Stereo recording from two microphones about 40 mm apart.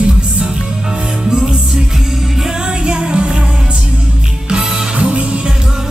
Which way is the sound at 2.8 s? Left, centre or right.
Right.